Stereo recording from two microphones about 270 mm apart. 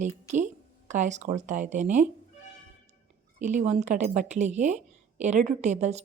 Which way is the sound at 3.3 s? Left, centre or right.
Right.